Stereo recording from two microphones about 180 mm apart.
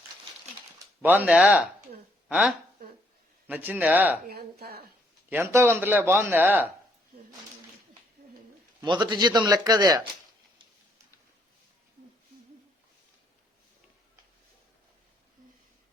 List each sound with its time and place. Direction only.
1.0 s speech: 10° right (ahead or behind)
3.4 s speech: 10° right (ahead or behind)
4.3 s a woman's voice: 60° right (ahead or behind)
5.3 s speech: 15° right (ahead or behind)
8.8 s speech: 25° right (ahead or behind)